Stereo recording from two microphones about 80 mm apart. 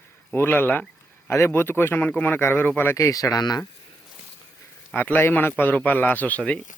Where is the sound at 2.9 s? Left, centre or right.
Left.